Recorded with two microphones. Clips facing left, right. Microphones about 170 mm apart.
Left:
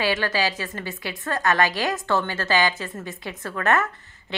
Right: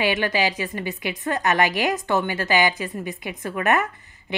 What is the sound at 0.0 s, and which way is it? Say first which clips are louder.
A woman's voice: right 2 dB; 20° right (ahead or behind).